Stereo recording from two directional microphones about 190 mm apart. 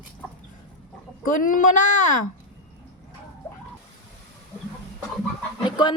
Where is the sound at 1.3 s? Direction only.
45° left (ahead or behind).